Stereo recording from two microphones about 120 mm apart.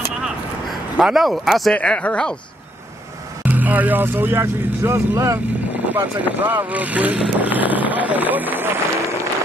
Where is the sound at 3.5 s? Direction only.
15° right (ahead or behind).